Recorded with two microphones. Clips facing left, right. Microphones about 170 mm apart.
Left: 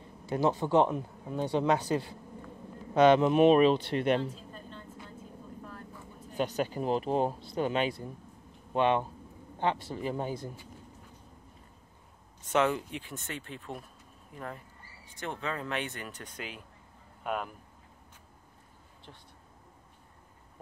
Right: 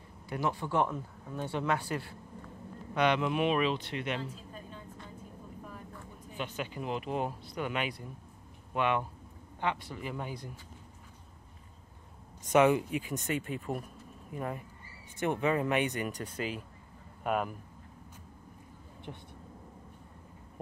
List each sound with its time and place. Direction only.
0.3 s speech: 25° left (ahead or behind)
1.4 s speech: 35° left (ahead or behind)
1.7 s speech: 20° left (ahead or behind)
2.9 s speech: 40° left (ahead or behind)
4.2 s a sound: 5° right (ahead or behind)
6.3 s speech: 40° left (ahead or behind)
12.4 s speech: 10° right (ahead or behind)
19.1 s speech: 10° right (ahead or behind)